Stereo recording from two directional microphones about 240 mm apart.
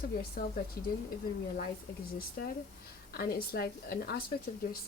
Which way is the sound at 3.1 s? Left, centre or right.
Left.